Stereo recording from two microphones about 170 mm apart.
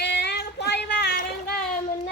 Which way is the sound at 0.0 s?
80° left.